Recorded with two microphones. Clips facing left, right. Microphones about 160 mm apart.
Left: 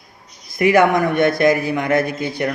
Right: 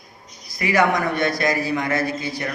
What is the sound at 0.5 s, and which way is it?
Speech, 55° left (ahead or behind).